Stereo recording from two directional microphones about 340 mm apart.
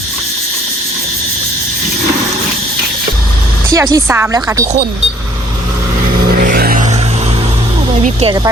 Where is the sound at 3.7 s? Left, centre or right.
Centre.